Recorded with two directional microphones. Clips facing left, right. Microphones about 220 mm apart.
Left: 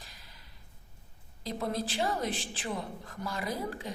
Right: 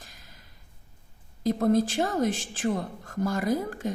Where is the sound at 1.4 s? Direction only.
45° right (ahead or behind).